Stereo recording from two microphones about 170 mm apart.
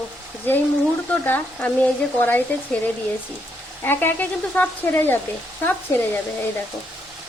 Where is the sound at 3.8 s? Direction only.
10° left (ahead or behind).